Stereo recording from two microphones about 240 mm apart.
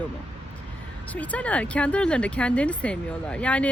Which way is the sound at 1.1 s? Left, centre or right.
Centre.